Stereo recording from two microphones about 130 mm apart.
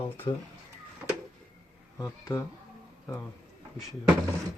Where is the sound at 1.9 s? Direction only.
25° left (ahead or behind).